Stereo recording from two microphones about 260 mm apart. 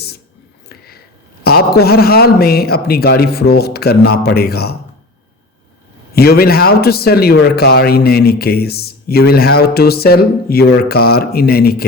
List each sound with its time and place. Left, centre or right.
1.5 s a man's voice: left
6.1 s a man's voice: left